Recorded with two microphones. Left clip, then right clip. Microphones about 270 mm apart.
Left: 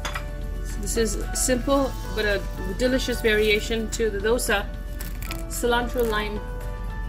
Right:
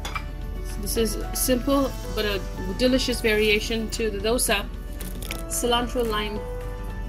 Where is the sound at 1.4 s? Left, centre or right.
Centre.